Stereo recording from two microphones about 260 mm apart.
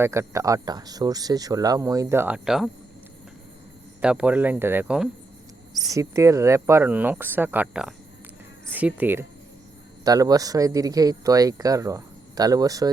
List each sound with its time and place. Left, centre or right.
0.0 s speech: centre
4.0 s speech: centre